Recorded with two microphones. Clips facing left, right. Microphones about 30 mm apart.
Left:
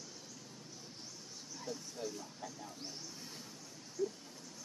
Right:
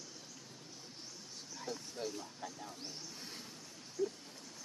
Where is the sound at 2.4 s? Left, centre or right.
Centre.